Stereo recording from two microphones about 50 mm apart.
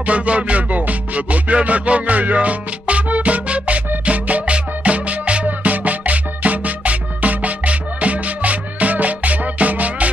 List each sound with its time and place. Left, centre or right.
0.0 s music: right